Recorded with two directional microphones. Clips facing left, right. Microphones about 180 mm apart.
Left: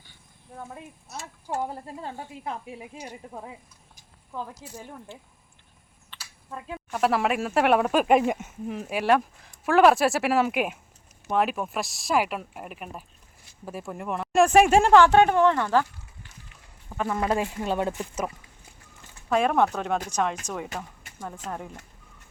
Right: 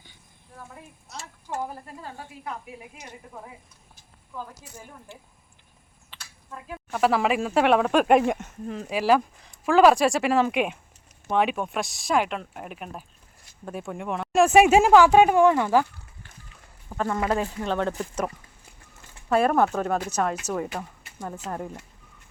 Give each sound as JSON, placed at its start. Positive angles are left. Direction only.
{"t": 1.6, "sound": "a woman's voice", "side_deg": 25}
{"t": 6.9, "sound": "speech", "side_deg": 0}
{"t": 9.0, "sound": "speech", "side_deg": 0}
{"t": 17.0, "sound": "speech", "side_deg": 10}
{"t": 19.3, "sound": "speech", "side_deg": -5}